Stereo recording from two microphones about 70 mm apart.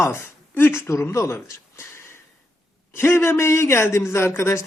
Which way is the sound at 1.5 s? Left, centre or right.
Left.